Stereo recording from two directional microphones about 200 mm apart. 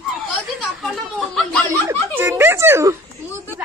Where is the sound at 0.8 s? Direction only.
5° left (ahead or behind).